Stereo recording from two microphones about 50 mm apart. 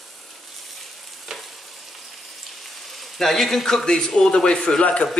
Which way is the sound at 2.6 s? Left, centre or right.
Centre.